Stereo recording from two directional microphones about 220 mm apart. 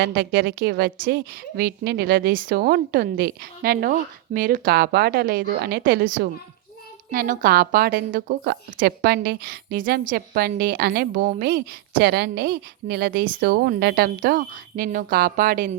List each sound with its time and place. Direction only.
0.0 s a woman's voice: 45° right (ahead or behind)